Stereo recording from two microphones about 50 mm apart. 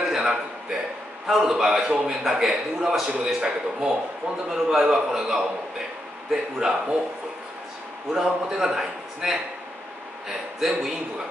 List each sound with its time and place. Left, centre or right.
0.0 s a sound: centre
1.2 s a man's voice: centre
1.9 s a man's voice: centre
2.2 s a man's voice: centre
3.3 s a man's voice: centre
4.5 s a man's voice: centre
8.1 s a man's voice: centre
10.6 s a man's voice: centre